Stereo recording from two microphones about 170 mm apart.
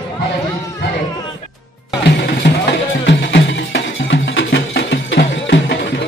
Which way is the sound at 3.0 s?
90° left.